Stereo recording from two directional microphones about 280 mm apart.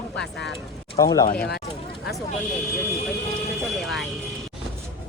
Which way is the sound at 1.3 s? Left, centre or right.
Left.